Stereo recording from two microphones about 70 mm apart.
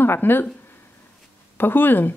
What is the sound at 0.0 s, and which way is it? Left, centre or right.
Speech, left.